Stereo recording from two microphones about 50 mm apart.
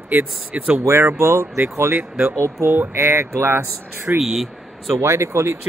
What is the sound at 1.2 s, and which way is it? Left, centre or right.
Speech, right.